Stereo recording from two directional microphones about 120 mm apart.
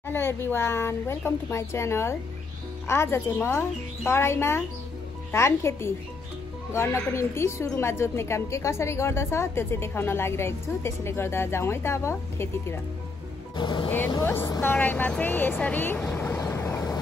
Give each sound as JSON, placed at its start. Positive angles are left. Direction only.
{"t": 0.1, "sound": "speech", "side_deg": 20}
{"t": 13.6, "sound": "speech", "side_deg": 40}
{"t": 13.8, "sound": "speech", "side_deg": 15}
{"t": 16.1, "sound": "vehicle", "side_deg": 15}